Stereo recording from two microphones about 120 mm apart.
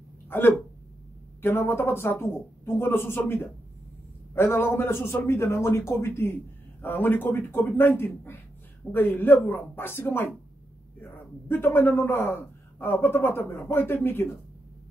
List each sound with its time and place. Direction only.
0.3 s a man's voice: 20° left (ahead or behind)